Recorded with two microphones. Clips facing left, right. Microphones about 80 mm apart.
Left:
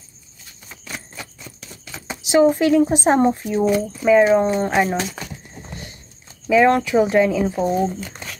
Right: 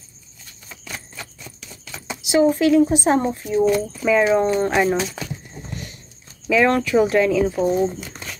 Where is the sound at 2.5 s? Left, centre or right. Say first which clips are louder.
Even; left.